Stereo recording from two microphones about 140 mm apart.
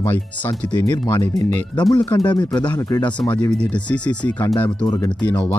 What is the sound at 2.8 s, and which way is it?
Speech, 20° left (ahead or behind).